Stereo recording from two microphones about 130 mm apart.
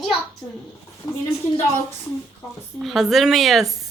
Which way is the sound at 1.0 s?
30° left (ahead or behind).